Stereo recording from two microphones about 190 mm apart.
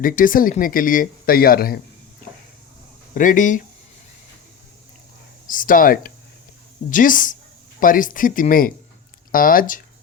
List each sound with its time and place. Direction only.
0.0 s speech: 45° left (ahead or behind)
3.2 s speech: 45° left (ahead or behind)
5.5 s speech: 45° left (ahead or behind)